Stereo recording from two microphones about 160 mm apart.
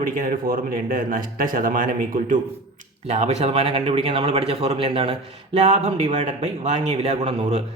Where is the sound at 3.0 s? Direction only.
45° right (ahead or behind).